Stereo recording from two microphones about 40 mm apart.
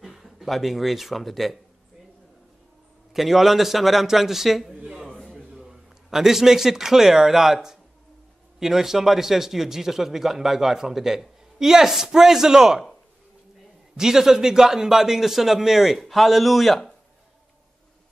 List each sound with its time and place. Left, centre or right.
0.0 s speech: centre
3.1 s a man's voice: centre
13.9 s speech: centre